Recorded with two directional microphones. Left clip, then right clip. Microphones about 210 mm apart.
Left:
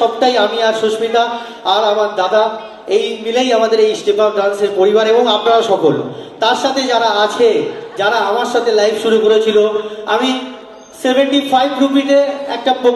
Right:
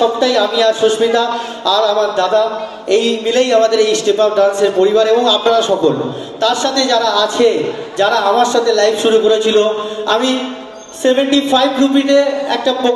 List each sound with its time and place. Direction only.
0.2 s speech: 35° right (ahead or behind)